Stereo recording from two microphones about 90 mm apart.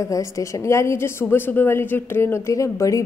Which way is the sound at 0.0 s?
35° left (ahead or behind).